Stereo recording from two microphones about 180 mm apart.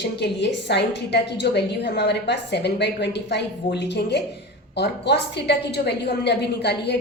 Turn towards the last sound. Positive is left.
turn(degrees=70)  # may be behind; listen again after turning